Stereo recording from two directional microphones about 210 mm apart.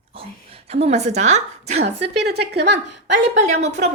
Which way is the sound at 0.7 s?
30° right (ahead or behind).